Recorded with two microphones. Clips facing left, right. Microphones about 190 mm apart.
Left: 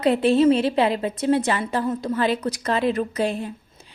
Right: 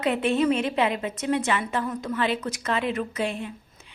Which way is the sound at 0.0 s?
35° left (ahead or behind).